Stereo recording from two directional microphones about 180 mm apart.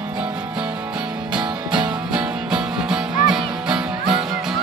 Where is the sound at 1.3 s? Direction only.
25° right (ahead or behind).